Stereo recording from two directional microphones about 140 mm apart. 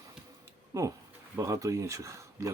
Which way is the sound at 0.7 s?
25° right (ahead or behind).